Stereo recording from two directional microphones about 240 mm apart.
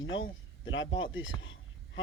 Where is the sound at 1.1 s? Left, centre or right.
Left.